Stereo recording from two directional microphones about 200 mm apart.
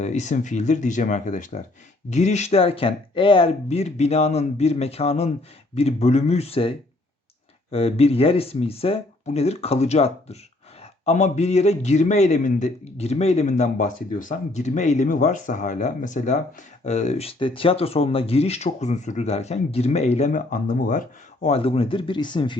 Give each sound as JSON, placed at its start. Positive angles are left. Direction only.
{"t": 0.0, "sound": "a man's voice", "side_deg": 35}